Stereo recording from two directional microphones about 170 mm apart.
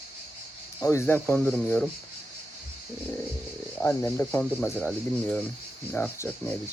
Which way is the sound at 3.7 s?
10° left (ahead or behind).